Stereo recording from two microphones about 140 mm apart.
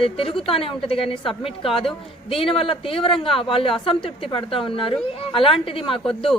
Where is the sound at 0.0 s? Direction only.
40° left (ahead or behind).